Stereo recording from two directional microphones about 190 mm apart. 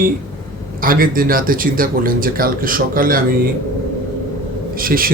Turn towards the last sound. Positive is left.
turn(degrees=-50)  # may be behind; listen again after turning